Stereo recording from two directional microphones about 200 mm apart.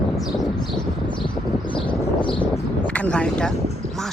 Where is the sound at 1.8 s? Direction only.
25° left (ahead or behind).